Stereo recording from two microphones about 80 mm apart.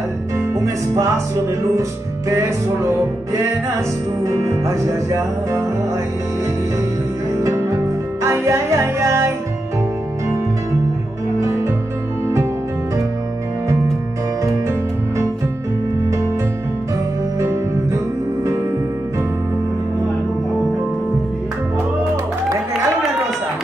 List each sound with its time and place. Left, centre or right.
0.9 s music: right
4.2 s music: right
7.7 s music: right